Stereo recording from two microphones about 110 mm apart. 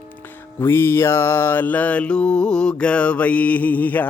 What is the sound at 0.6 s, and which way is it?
Mantra, 20° left (ahead or behind).